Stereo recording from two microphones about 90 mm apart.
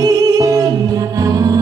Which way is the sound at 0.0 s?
45° right (ahead or behind).